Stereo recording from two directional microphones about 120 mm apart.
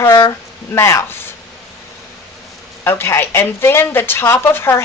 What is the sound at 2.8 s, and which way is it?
A woman's voice, 20° left (ahead or behind).